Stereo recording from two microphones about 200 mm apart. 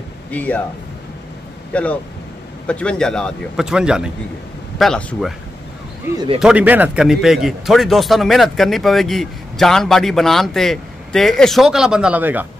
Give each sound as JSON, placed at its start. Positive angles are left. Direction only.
{"t": 0.3, "sound": "speech", "side_deg": 5}
{"t": 1.7, "sound": "a man's voice", "side_deg": 5}
{"t": 6.1, "sound": "speech", "side_deg": -25}
{"t": 6.4, "sound": "a man's voice", "side_deg": -5}